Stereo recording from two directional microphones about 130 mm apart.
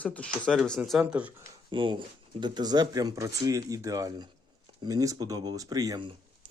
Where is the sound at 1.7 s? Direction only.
40° right (ahead or behind).